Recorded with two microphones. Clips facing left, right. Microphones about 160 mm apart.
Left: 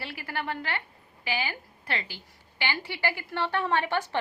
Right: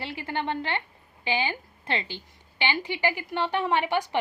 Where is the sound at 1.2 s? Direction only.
25° right (ahead or behind).